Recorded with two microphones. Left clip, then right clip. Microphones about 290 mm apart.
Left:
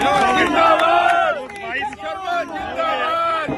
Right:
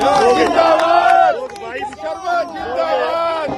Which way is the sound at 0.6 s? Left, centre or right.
Right.